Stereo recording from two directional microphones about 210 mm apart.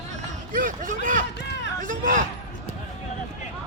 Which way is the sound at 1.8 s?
40° right (ahead or behind).